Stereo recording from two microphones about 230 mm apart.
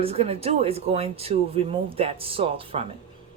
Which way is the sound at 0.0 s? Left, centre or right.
Right.